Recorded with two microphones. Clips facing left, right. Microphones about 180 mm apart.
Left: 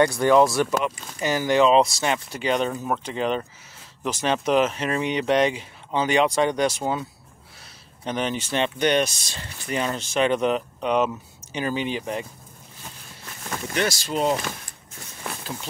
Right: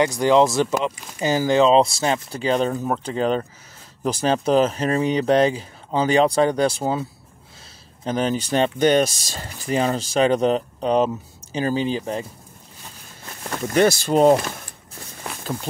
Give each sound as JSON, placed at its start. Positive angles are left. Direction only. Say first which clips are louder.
{"t": 0.0, "sound": "speech", "louder": "right 1 dB", "side_deg": -20}
{"t": 13.7, "sound": "speech", "louder": "right 9 dB", "side_deg": -50}